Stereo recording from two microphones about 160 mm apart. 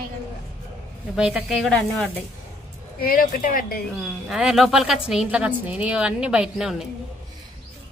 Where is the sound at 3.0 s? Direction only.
60° left (ahead or behind).